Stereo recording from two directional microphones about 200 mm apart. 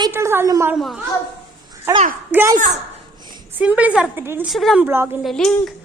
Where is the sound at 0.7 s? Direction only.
Centre (ahead or behind).